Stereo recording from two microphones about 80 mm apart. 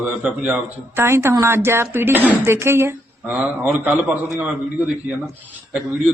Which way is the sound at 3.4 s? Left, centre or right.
Centre.